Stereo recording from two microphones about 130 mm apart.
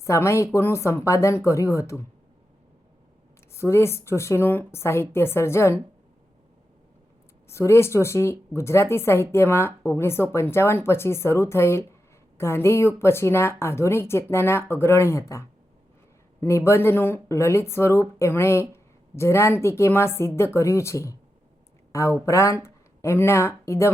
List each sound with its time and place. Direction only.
0.0 s speech: 20° left (ahead or behind)
3.5 s speech: 20° left (ahead or behind)
7.4 s speech: 20° left (ahead or behind)
22.3 s speech: 25° left (ahead or behind)